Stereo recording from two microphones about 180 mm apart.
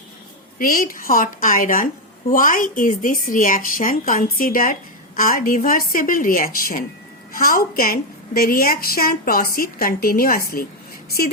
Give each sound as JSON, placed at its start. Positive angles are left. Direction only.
{"t": 0.6, "sound": "a woman's voice", "side_deg": 50}